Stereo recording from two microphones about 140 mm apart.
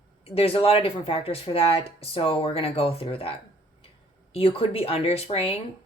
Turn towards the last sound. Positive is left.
turn(degrees=45)  # may be behind; listen again after turning